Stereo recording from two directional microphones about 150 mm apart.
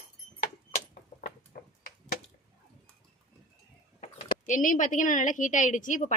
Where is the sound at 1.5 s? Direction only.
90° left.